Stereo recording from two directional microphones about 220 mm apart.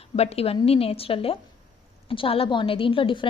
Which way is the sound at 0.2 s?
30° left (ahead or behind).